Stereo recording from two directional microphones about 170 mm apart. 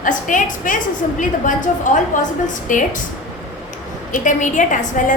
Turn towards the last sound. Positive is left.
turn(degrees=50)  # may be behind; listen again after turning